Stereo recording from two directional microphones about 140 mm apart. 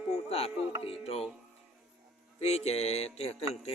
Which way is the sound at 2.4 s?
50° left (ahead or behind).